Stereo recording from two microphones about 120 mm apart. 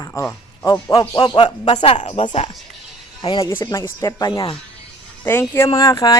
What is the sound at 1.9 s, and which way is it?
Speech, 65° left (ahead or behind).